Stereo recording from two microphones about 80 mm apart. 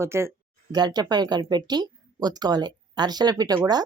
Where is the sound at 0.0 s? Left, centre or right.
Right.